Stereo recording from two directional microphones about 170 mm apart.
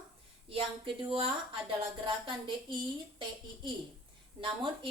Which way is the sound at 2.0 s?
30° right (ahead or behind).